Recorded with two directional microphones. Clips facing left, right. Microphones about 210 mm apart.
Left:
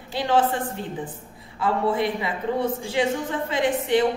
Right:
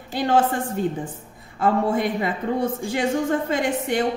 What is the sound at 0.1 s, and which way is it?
Speech, 45° right (ahead or behind).